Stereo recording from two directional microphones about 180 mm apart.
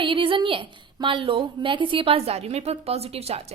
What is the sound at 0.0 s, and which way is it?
A woman's voice, 25° right (ahead or behind).